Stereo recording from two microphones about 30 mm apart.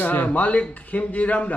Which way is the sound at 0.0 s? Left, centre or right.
Left.